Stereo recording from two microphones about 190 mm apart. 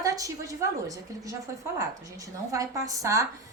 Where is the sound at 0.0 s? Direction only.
15° right (ahead or behind).